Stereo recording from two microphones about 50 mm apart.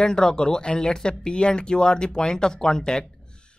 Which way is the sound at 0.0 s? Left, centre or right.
Centre.